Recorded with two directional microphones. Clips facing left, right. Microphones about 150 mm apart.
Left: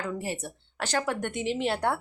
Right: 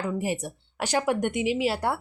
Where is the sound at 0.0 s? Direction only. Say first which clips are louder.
Right 4 dB; 10° right (ahead or behind).